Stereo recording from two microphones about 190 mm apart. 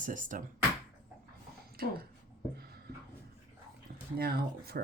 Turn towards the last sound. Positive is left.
turn(degrees=-55)  # may be behind; listen again after turning